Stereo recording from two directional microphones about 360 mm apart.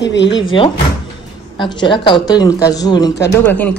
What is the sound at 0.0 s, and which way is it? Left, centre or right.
Speech, left.